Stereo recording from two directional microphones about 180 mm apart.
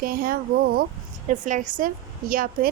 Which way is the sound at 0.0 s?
55° right (ahead or behind).